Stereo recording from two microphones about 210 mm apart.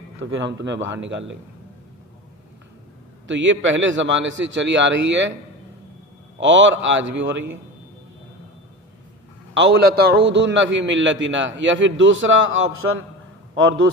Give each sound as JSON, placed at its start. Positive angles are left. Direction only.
{"t": 0.2, "sound": "a man's voice", "side_deg": -60}
{"t": 3.2, "sound": "a man's voice", "side_deg": -60}
{"t": 6.4, "sound": "a man's voice", "side_deg": -60}
{"t": 9.6, "sound": "a man's voice", "side_deg": -55}